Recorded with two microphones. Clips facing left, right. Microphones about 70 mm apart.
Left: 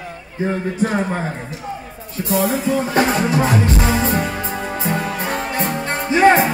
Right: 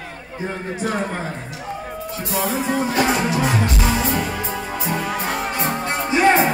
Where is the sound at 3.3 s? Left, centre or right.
Left.